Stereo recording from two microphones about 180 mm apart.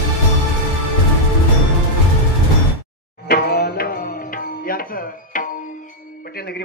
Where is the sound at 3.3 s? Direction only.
60° left (ahead or behind).